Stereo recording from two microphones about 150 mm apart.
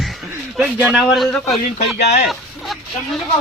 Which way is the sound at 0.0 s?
Centre (ahead or behind).